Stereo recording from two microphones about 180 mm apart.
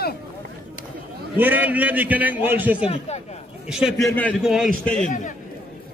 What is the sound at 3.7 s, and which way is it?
Speech, 5° right (ahead or behind).